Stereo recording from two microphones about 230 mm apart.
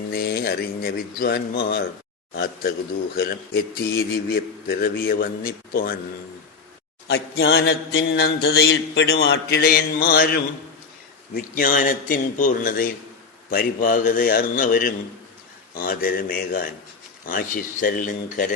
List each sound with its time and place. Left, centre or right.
0.1 s a man's voice: left
2.3 s mantra: left
3.2 s a man's voice: left
7.1 s mantra: left
11.3 s a man's voice: left